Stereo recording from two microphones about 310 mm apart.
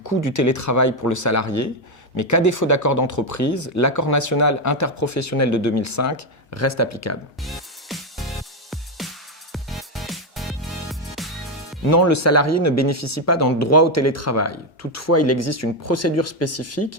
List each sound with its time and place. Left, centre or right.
0.0 s speech: left
7.4 s music: centre
11.9 s speech: left